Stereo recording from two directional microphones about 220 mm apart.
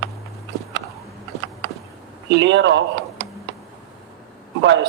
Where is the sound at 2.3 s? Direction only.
60° right (ahead or behind).